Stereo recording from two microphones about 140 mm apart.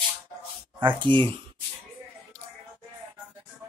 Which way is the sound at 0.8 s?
35° right (ahead or behind).